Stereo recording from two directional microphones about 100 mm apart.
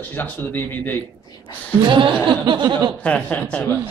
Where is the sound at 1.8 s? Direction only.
50° right (ahead or behind).